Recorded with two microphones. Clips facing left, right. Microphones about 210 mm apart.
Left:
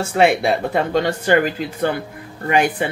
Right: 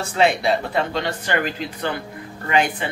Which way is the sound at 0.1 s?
55° left (ahead or behind).